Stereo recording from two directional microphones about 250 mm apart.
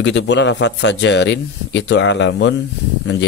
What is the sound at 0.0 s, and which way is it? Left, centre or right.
Speech, left.